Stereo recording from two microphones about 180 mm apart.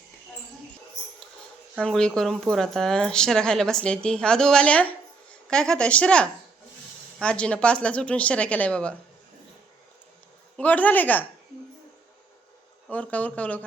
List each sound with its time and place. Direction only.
1.8 s a woman's voice: 5° left (ahead or behind)
10.6 s a woman's voice: 10° left (ahead or behind)
12.9 s a woman's voice: 10° left (ahead or behind)